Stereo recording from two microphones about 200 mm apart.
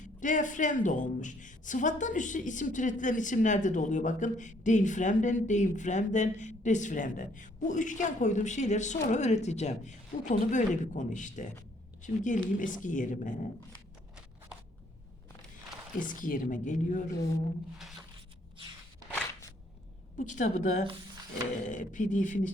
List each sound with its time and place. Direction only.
0.2 s a woman's voice: 40° left (ahead or behind)
16.0 s a woman's voice: 40° left (ahead or behind)
17.7 s a sound: centre (ahead or behind)
19.1 s a sound: 15° left (ahead or behind)
20.1 s a woman's voice: 40° left (ahead or behind)
21.6 s a woman's voice: 40° left (ahead or behind)